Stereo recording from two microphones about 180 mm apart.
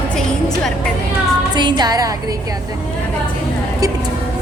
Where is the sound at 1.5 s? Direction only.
25° right (ahead or behind).